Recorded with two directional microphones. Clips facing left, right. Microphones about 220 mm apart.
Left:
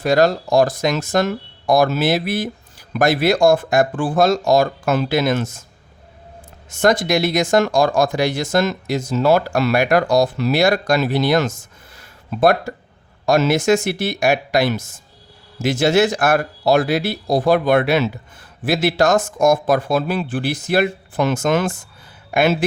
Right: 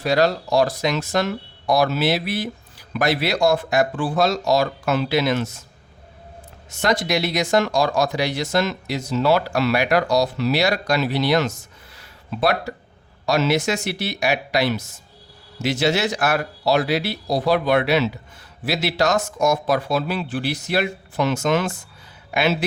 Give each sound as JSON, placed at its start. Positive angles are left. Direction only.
{"t": 0.0, "sound": "speech", "side_deg": 50}
{"t": 6.7, "sound": "speech", "side_deg": 50}